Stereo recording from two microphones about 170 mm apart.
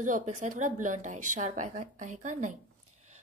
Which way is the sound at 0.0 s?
50° right (ahead or behind).